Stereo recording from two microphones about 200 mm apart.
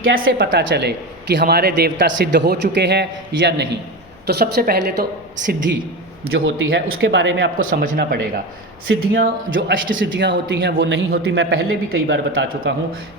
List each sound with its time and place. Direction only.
0.0 s speech: 45° right (ahead or behind)
0.3 s a man's voice: 55° right (ahead or behind)
6.7 s a woman's voice: 50° right (ahead or behind)
7.0 s a man's voice: 70° right (ahead or behind)
7.6 s a woman's voice: 45° right (ahead or behind)
9.5 s a man's voice: 70° right (ahead or behind)
12.3 s a woman's voice: 50° right (ahead or behind)